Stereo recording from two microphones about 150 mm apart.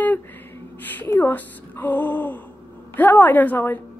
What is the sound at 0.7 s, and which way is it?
A woman's voice, 10° left (ahead or behind).